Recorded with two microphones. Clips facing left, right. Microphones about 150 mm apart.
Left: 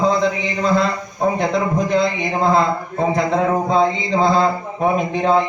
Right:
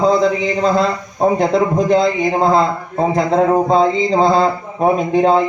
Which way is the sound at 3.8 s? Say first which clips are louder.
Right 3 dB; 35° right (ahead or behind).